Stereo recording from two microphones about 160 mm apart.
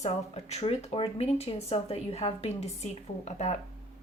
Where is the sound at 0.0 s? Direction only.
40° left (ahead or behind).